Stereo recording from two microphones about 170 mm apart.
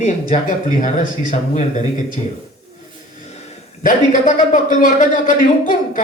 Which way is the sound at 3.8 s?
50° left (ahead or behind).